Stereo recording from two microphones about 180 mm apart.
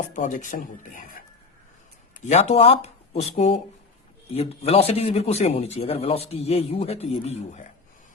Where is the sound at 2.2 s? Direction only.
40° left (ahead or behind).